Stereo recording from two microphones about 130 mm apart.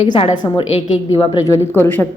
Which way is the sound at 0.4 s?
30° left (ahead or behind).